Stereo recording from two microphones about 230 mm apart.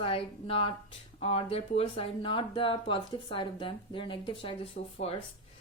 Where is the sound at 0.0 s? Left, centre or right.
Left.